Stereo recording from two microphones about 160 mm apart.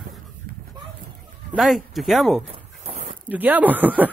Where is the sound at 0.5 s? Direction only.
65° right (ahead or behind).